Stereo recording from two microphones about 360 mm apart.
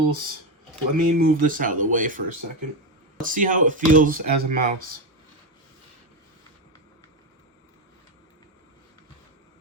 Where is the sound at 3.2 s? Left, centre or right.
Right.